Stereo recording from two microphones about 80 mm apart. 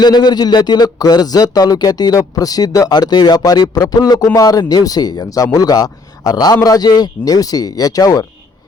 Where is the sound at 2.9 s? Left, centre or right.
Left.